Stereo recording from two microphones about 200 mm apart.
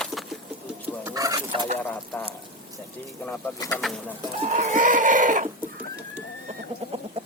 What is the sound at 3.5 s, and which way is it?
Speech, 5° left (ahead or behind).